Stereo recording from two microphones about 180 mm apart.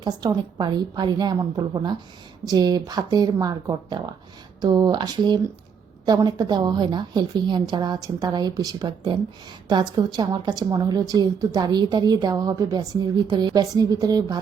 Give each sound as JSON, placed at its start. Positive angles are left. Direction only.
{"t": 0.0, "sound": "a woman's voice", "side_deg": -25}